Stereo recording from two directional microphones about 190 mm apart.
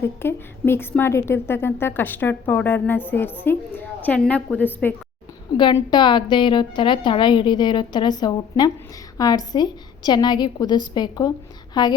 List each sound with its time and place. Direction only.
0.0 s a woman's voice: 10° left (ahead or behind)
5.5 s a woman's voice: 25° left (ahead or behind)